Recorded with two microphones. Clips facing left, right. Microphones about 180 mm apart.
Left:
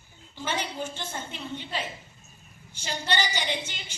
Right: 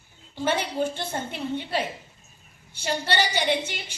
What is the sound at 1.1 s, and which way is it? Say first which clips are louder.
A woman's voice: right 7 dB; 55° right (ahead or behind).